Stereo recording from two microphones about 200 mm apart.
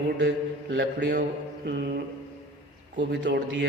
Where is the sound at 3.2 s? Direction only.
65° right (ahead or behind).